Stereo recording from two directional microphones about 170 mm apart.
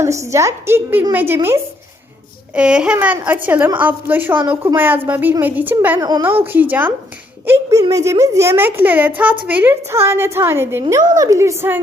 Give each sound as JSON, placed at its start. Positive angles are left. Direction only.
{"t": 0.0, "sound": "a woman's voice", "side_deg": -15}